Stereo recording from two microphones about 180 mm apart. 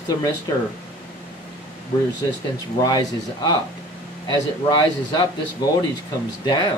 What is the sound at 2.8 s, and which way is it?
Speech, 20° left (ahead or behind).